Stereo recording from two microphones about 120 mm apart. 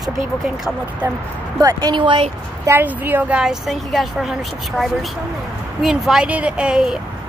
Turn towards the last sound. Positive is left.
turn(degrees=-5)  # may be behind; listen again after turning